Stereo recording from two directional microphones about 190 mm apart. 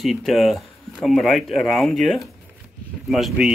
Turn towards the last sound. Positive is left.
turn(degrees=0)  # may be behind; listen again after turning